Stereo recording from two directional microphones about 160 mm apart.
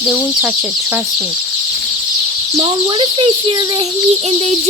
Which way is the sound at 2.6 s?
30° right (ahead or behind).